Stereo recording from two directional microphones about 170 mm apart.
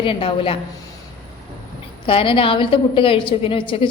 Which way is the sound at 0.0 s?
30° left (ahead or behind).